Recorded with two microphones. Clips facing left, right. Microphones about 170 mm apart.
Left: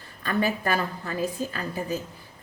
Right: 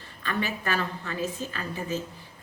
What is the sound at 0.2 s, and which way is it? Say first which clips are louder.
Speech: left 5 dB; 40° left (ahead or behind).